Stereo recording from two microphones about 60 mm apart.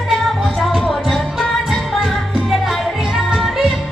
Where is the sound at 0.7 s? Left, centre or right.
Centre.